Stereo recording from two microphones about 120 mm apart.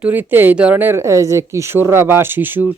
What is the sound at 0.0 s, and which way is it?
Speech, 15° right (ahead or behind).